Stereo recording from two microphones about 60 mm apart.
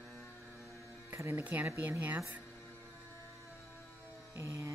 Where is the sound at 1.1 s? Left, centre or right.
Right.